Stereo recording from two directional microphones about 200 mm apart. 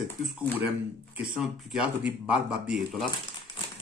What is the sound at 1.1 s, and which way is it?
Speech, centre (ahead or behind).